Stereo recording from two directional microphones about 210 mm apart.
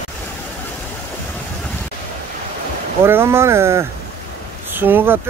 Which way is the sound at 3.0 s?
10° right (ahead or behind).